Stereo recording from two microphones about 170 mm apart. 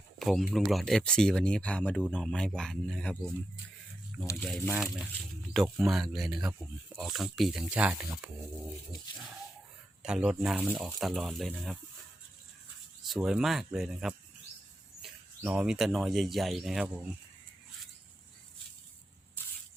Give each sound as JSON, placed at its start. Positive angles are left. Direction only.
{"t": 0.2, "sound": "speech", "side_deg": 0}
{"t": 4.4, "sound": "speech", "side_deg": 0}
{"t": 10.0, "sound": "speech", "side_deg": -5}
{"t": 13.1, "sound": "speech", "side_deg": -5}
{"t": 15.4, "sound": "speech", "side_deg": -5}